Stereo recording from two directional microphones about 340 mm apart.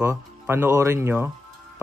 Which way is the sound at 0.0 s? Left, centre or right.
Centre.